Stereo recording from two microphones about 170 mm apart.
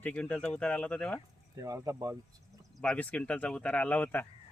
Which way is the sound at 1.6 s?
20° right (ahead or behind).